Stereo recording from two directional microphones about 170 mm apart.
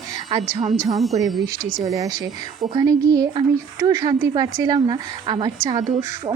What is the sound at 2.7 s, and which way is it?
Speech, 20° right (ahead or behind).